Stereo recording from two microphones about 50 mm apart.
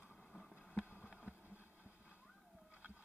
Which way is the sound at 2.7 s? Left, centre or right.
Right.